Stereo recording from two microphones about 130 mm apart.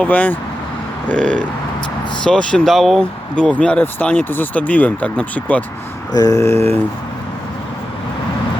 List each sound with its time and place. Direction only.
0.0 s speech: 10° left (ahead or behind)
6.1 s mantra: 25° left (ahead or behind)